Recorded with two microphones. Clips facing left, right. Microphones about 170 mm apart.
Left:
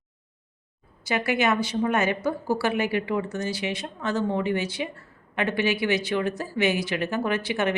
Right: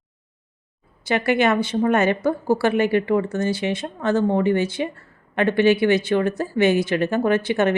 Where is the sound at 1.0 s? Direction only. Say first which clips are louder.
Right 5 dB; 55° right (ahead or behind).